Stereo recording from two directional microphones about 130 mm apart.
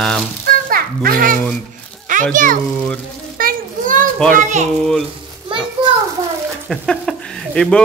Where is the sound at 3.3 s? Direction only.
90° right.